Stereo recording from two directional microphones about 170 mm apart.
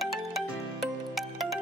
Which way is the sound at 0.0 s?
Centre (ahead or behind).